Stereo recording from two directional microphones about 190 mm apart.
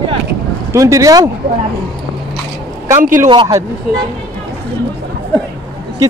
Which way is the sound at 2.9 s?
45° right (ahead or behind).